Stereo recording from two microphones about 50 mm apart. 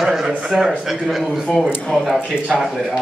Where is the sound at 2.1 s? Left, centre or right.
Centre.